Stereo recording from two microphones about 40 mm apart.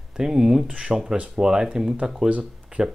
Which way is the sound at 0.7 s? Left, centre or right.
Right.